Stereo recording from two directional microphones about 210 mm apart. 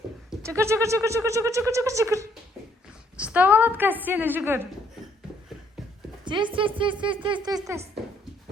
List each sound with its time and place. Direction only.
0.4 s speech: 15° right (ahead or behind)
6.2 s speech: 20° right (ahead or behind)